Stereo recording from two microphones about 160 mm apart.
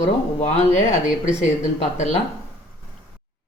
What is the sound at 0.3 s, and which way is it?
Speech, 40° left (ahead or behind).